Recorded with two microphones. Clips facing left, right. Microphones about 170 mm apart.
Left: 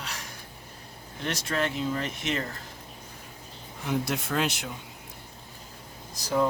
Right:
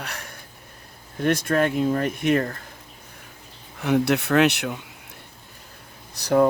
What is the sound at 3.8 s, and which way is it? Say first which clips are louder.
Speech: right 9 dB; 70° right (ahead or behind).